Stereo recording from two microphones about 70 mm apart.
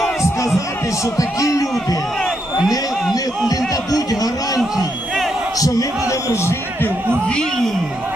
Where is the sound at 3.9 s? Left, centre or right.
Left.